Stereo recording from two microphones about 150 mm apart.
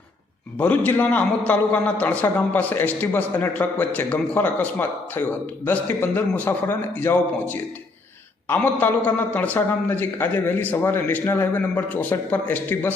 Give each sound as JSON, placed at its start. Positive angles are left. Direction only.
{"t": 0.6, "sound": "a man's voice", "side_deg": 10}